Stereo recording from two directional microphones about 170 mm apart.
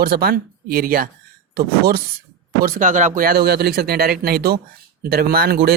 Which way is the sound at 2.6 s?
50° right (ahead or behind).